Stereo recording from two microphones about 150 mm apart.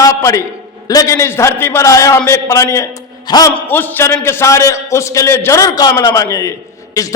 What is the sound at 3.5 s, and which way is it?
A man's voice, 15° left (ahead or behind).